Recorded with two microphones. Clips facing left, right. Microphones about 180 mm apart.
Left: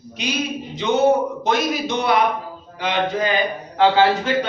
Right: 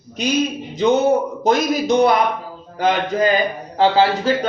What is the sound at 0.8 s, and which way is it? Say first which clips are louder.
A man's voice: right 2 dB; 40° right (ahead or behind).